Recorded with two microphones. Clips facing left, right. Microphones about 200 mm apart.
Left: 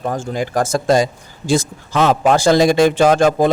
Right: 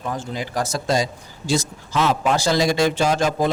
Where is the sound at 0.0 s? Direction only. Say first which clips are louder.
Left 6 dB; 50° left (ahead or behind).